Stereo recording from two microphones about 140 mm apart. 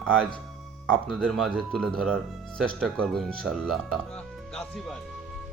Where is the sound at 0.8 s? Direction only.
Centre (ahead or behind).